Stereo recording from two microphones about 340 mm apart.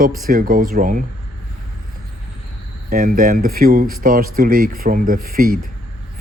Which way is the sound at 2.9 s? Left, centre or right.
Right.